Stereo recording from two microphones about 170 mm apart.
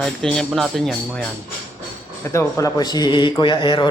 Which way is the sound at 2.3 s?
15° left (ahead or behind).